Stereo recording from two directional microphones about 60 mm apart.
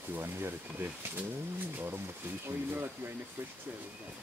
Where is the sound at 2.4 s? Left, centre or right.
Right.